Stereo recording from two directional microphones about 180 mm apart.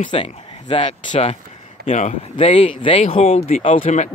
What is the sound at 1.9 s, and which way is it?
Speech, 40° left (ahead or behind).